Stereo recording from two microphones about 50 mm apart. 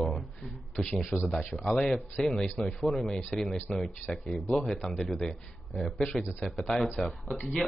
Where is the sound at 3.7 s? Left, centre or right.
Left.